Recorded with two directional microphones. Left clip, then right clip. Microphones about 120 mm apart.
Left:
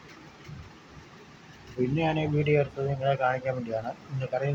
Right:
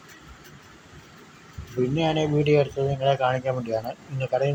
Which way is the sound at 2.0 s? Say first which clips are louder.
Right 5 dB; 45° right (ahead or behind).